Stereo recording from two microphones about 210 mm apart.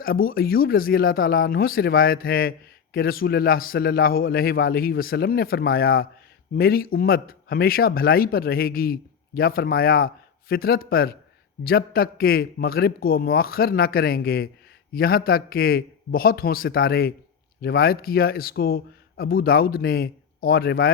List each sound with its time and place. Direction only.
0.0 s speech: 45° left (ahead or behind)